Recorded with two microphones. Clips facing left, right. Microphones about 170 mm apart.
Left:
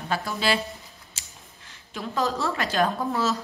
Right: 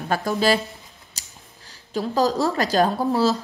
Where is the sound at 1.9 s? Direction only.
35° right (ahead or behind).